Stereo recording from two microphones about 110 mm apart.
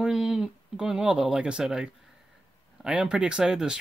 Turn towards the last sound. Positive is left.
turn(degrees=-5)  # may be behind; listen again after turning